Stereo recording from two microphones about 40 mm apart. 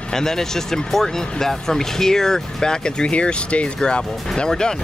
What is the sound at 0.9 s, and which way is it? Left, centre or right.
Speech, centre.